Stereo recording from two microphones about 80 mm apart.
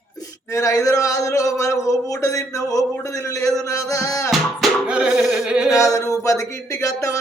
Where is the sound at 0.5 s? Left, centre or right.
Left.